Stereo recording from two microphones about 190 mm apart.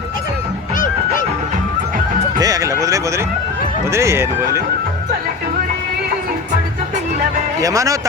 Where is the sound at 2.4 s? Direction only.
20° right (ahead or behind).